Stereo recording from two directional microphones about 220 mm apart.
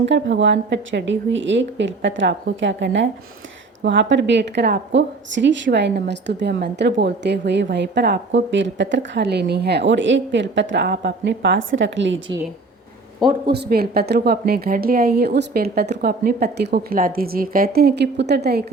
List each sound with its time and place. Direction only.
0.0 s a woman's voice: 55° right (ahead or behind)
13.5 s a woman's voice: 45° right (ahead or behind)